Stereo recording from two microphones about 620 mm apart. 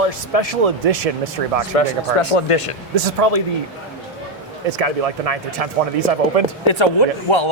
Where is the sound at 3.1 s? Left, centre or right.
Right.